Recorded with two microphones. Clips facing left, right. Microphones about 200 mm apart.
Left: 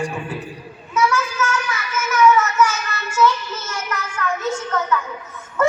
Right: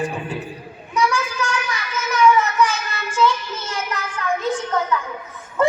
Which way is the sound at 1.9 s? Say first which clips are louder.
Left 1 dB; 35° right (ahead or behind).